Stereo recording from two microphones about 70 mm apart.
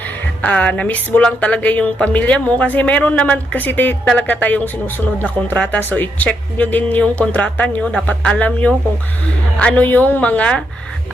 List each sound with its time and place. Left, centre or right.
0.0 s speech: left